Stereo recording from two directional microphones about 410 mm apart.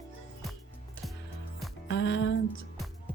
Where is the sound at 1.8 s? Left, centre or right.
Left.